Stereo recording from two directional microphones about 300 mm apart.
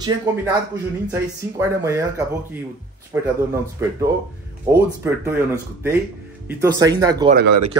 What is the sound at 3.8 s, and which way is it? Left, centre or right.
Speech, centre.